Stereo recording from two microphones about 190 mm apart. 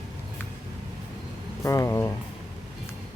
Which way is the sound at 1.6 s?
15° left (ahead or behind).